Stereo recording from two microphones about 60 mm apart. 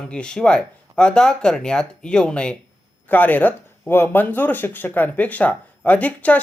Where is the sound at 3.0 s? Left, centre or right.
Left.